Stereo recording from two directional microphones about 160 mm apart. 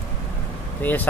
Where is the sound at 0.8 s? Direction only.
10° left (ahead or behind).